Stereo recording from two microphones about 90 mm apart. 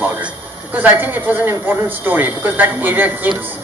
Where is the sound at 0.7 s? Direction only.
20° right (ahead or behind).